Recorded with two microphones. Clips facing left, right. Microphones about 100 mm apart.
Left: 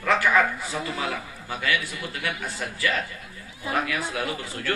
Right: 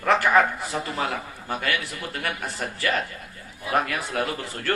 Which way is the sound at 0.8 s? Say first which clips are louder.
Right 2 dB; 45° right (ahead or behind).